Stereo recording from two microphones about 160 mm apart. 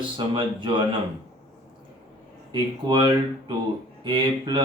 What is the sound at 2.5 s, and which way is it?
Speech, 25° right (ahead or behind).